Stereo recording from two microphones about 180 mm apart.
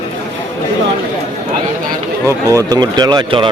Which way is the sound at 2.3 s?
20° right (ahead or behind).